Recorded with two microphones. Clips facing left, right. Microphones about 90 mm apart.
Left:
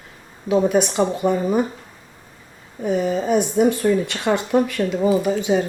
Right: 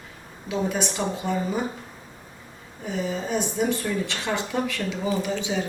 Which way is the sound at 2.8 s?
50° left (ahead or behind).